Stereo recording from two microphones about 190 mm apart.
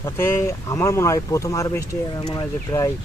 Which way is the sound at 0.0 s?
15° left (ahead or behind).